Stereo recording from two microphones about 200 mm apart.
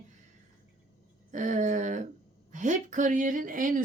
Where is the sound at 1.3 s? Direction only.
40° right (ahead or behind).